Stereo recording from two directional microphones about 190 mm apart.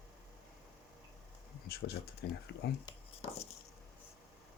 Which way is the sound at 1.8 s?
65° left (ahead or behind).